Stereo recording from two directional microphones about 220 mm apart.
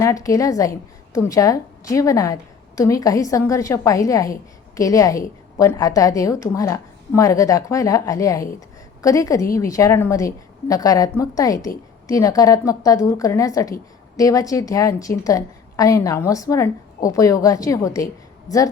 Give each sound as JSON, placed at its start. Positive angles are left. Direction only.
{"t": 0.0, "sound": "a woman's voice", "side_deg": 15}